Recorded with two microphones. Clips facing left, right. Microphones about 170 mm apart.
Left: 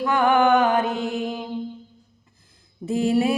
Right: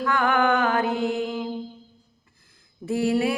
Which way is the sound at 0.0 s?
20° left (ahead or behind).